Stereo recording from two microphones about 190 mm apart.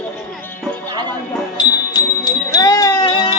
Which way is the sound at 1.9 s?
20° left (ahead or behind).